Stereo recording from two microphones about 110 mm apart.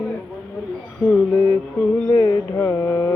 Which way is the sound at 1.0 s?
20° left (ahead or behind).